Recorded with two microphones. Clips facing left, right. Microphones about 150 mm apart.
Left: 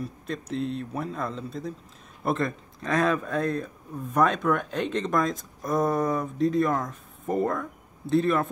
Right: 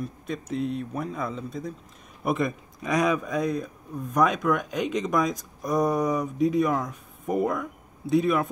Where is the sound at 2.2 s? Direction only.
10° right (ahead or behind).